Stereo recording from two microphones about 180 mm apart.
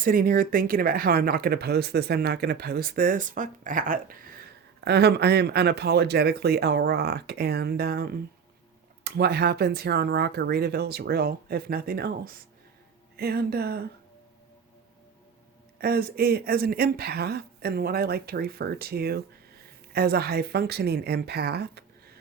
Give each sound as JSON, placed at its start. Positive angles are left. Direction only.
{"t": 0.0, "sound": "speech", "side_deg": -50}
{"t": 4.8, "sound": "speech", "side_deg": -65}
{"t": 15.8, "sound": "speech", "side_deg": -60}